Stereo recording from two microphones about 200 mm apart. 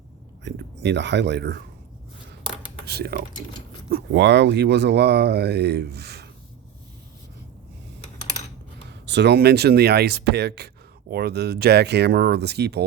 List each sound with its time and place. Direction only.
0.4 s speech: 60° right (ahead or behind)
2.8 s speech: 50° right (ahead or behind)
4.1 s speech: 60° right (ahead or behind)
8.9 s speech: 60° right (ahead or behind)